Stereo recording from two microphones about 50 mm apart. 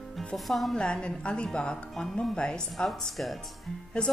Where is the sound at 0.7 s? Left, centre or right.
Centre.